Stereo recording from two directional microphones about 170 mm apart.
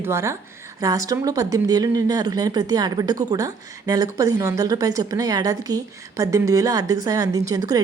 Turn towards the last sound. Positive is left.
turn(degrees=-20)  # may be behind; listen again after turning